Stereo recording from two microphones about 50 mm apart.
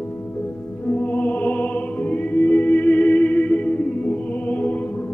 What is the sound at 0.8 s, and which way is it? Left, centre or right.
Music, left.